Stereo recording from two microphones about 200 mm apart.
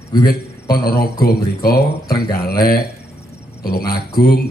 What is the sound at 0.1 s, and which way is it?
A man's voice, 50° left (ahead or behind).